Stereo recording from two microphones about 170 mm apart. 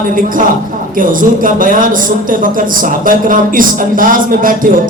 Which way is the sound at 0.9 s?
55° right (ahead or behind).